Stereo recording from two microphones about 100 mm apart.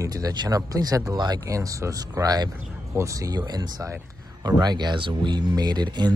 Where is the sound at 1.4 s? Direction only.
35° right (ahead or behind).